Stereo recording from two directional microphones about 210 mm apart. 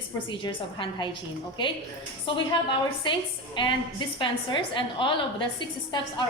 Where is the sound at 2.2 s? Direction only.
25° left (ahead or behind).